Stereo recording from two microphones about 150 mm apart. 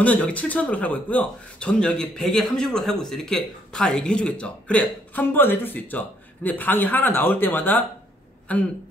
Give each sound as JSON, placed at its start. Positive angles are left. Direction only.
{"t": 0.0, "sound": "a man's voice", "side_deg": 10}